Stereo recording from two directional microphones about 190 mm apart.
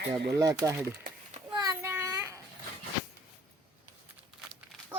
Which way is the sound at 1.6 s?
15° right (ahead or behind).